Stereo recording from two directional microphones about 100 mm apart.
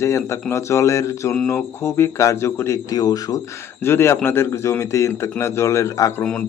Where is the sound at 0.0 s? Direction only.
30° left (ahead or behind).